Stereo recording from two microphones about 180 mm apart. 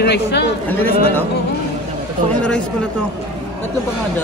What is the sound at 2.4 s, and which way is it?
Speech, 5° left (ahead or behind).